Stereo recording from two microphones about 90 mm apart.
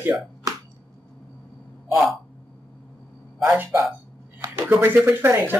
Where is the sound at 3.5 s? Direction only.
25° right (ahead or behind).